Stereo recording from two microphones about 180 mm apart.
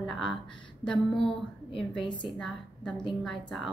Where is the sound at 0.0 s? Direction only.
Centre (ahead or behind).